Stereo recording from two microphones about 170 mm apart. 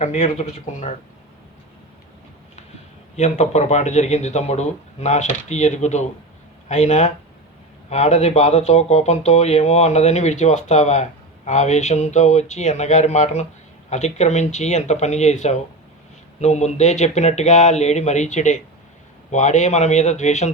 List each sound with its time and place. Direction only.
0.0 s speech: 45° left (ahead or behind)
3.2 s speech: 40° left (ahead or behind)